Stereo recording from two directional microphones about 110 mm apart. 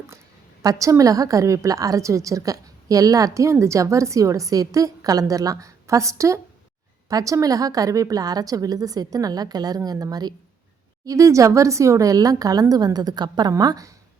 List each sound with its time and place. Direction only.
0.6 s a woman's voice: 30° right (ahead or behind)